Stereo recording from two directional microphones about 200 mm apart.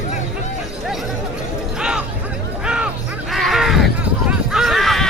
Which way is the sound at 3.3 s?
Centre (ahead or behind).